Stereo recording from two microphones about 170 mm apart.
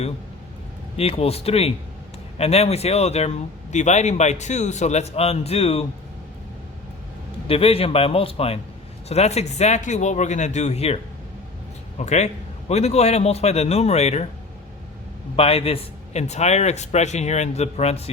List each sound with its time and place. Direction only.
0.9 s speech: 35° left (ahead or behind)
7.4 s speech: 35° left (ahead or behind)
15.4 s speech: 35° left (ahead or behind)